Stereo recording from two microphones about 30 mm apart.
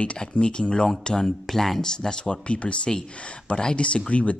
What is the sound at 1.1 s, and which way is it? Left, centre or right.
Speech, centre.